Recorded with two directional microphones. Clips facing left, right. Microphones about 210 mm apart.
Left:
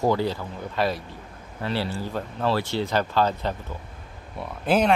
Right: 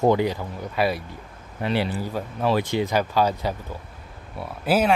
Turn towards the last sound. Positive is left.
turn(degrees=-5)  # may be behind; listen again after turning